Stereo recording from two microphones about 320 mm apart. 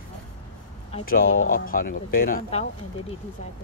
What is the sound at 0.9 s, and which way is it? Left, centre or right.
Speech, left.